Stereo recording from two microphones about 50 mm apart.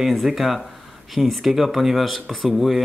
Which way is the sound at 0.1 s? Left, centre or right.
Centre.